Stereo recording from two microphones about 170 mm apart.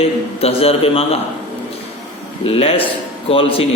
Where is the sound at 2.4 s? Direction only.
35° left (ahead or behind).